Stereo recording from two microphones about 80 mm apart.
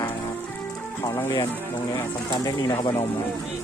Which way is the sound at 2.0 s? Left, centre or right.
Left.